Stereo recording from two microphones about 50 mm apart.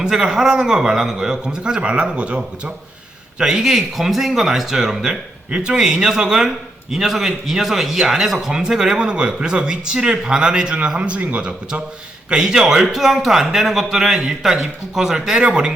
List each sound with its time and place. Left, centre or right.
0.0 s a man's voice: centre
5.5 s a man's voice: right
12.3 s a man's voice: centre